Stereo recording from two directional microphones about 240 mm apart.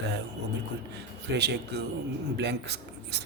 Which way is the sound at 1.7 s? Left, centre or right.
Right.